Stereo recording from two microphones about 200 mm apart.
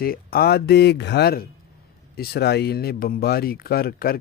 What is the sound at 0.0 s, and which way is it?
Speech, 50° left (ahead or behind).